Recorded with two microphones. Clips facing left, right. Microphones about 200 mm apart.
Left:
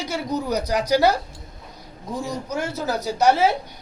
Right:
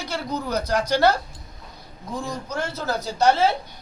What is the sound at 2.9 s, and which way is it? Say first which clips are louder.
Speech: left 3 dB; 40° left (ahead or behind).